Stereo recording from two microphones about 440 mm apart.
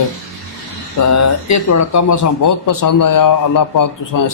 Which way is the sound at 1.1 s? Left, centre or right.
Left.